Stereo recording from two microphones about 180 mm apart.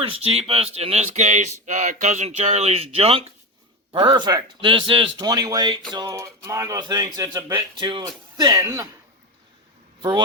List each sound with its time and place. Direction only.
0.0 s speech: 30° right (ahead or behind); by 8.9 s 15° right (ahead or behind)
10.0 s speech: 25° right (ahead or behind)